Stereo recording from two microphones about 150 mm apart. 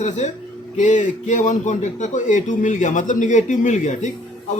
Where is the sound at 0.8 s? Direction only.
55° left (ahead or behind).